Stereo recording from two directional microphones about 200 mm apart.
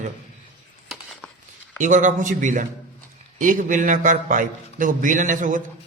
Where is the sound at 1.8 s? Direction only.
40° right (ahead or behind).